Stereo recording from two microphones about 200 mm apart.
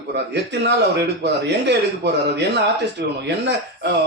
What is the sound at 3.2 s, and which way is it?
Speech, 60° right (ahead or behind).